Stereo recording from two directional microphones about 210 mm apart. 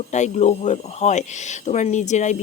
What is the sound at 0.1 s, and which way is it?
Speech, 35° left (ahead or behind).